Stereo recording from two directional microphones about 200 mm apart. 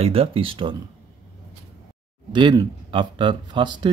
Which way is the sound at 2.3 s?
25° right (ahead or behind).